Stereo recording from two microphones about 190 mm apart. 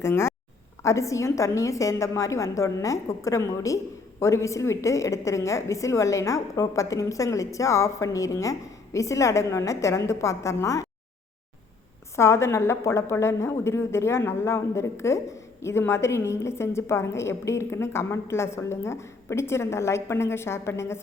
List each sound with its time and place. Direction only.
0.0 s a woman's voice: 15° left (ahead or behind)
12.1 s a woman's voice: 15° left (ahead or behind)